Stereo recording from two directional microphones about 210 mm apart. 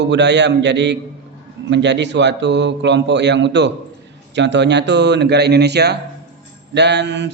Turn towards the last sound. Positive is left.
turn(degrees=-60)  # may be behind; listen again after turning